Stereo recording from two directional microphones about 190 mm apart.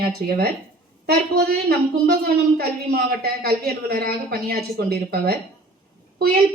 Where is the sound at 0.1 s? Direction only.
55° right (ahead or behind).